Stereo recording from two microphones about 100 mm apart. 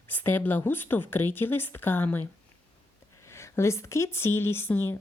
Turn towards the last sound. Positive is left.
turn(degrees=25)  # may be behind; listen again after turning